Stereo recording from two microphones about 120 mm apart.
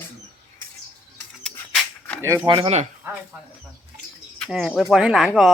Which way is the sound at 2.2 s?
20° right (ahead or behind).